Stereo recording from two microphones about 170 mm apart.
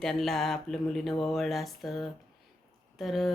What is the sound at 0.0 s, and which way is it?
Speech, centre (ahead or behind).